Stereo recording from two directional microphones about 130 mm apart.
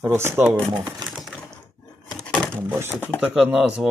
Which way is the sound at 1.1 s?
Centre (ahead or behind).